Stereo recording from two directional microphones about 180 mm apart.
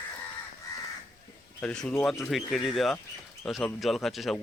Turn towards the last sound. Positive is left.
turn(degrees=0)  # may be behind; listen again after turning